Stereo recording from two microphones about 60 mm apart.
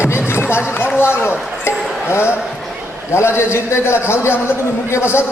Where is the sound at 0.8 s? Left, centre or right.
Left.